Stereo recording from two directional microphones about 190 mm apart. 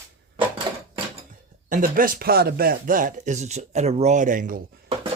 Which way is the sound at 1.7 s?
45° right (ahead or behind).